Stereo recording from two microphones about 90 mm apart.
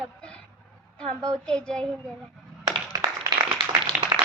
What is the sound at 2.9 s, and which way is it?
Clapping, 40° right (ahead or behind).